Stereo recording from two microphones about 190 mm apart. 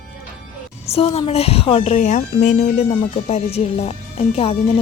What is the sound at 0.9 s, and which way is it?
Speech, 30° left (ahead or behind).